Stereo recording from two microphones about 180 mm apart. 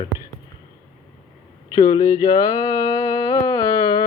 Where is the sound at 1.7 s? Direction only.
20° left (ahead or behind).